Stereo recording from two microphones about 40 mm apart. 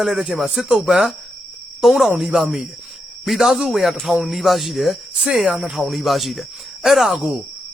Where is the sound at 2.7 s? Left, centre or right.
Centre.